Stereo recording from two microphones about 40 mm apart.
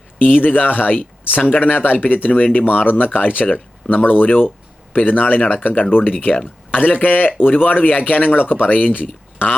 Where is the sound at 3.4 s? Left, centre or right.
Left.